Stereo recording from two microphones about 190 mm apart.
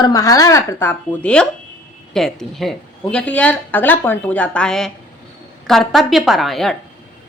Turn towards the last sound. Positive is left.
turn(degrees=0)  # may be behind; listen again after turning